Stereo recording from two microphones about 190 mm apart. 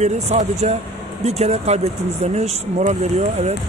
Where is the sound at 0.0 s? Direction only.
40° right (ahead or behind).